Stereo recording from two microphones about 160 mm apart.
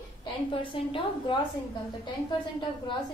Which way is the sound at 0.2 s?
30° left (ahead or behind).